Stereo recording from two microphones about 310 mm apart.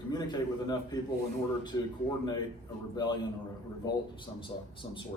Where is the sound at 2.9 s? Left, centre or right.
Centre.